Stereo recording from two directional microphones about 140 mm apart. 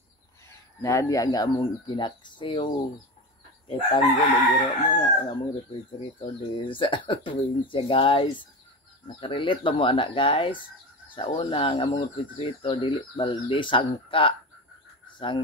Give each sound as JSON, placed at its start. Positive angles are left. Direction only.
{"t": 0.8, "sound": "speech", "side_deg": 20}